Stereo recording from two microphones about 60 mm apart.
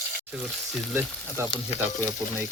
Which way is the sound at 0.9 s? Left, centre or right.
Right.